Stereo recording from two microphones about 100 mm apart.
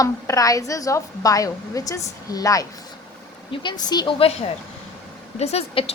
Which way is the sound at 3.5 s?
50° left (ahead or behind).